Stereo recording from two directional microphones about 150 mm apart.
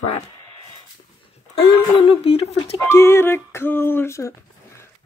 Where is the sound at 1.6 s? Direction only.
40° left (ahead or behind).